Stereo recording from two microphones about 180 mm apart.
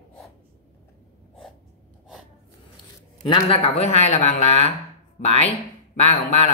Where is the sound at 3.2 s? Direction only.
30° left (ahead or behind).